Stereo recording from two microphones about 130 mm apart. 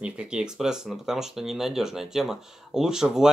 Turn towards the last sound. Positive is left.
turn(degrees=-5)  # may be behind; listen again after turning